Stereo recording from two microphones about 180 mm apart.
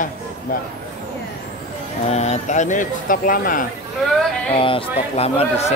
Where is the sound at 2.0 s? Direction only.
40° left (ahead or behind).